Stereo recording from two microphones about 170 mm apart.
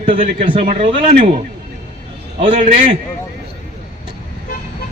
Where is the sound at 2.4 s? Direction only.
45° right (ahead or behind).